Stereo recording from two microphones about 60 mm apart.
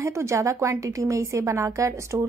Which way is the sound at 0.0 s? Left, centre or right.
Right.